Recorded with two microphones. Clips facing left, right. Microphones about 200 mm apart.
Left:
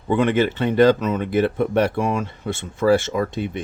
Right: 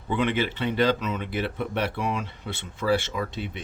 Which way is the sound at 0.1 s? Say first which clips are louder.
Left 7 dB; 45° left (ahead or behind).